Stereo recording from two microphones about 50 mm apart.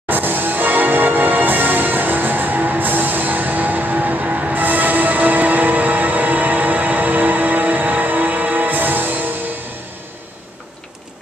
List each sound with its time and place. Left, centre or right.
0.1 s music: right